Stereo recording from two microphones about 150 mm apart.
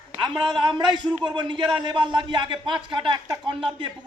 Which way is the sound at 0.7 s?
30° right (ahead or behind).